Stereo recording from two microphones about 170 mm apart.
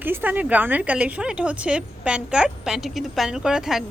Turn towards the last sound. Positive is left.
turn(degrees=-5)  # may be behind; listen again after turning